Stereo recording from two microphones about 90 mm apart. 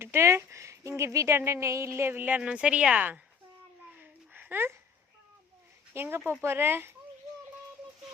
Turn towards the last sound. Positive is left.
turn(degrees=-25)  # may be behind; listen again after turning